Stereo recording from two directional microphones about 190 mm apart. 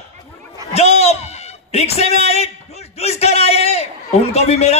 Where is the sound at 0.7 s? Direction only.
35° left (ahead or behind).